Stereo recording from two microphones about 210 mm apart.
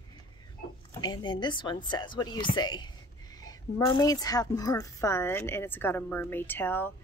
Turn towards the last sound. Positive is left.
turn(degrees=10)  # may be behind; listen again after turning